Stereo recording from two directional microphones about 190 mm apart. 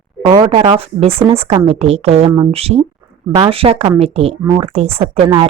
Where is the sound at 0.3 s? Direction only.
25° right (ahead or behind).